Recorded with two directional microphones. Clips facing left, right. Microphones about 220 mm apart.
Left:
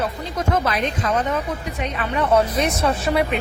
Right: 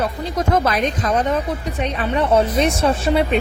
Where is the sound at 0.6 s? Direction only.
40° right (ahead or behind).